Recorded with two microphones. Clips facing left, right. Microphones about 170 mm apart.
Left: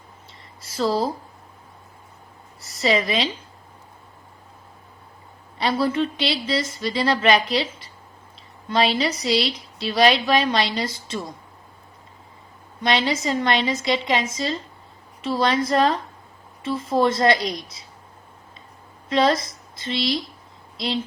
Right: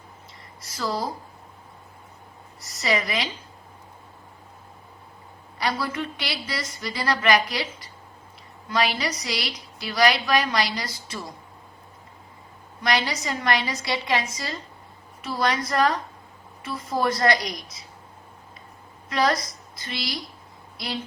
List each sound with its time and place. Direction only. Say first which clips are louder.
0.6 s a woman's voice: left 6 dB; 30° left (ahead or behind)
2.6 s a woman's voice: left 4 dB; 30° left (ahead or behind)
5.5 s a woman's voice: left 6 dB; 25° left (ahead or behind)
12.8 s a woman's voice: left 4 dB; 25° left (ahead or behind)
19.0 s a woman's voice: left 4 dB; 25° left (ahead or behind)